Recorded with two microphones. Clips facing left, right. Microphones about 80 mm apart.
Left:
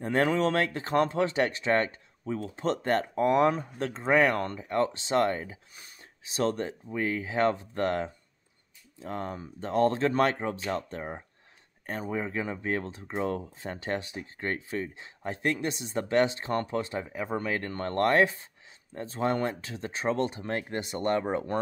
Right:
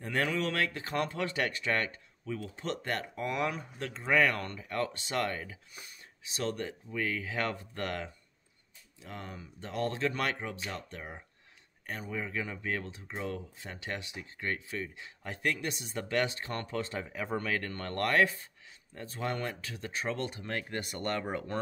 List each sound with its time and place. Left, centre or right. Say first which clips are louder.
0.0 s speech: left 7 dB; left